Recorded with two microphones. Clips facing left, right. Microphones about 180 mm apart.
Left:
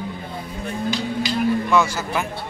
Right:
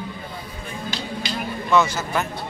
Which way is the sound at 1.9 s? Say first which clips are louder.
Even; 10° left (ahead or behind).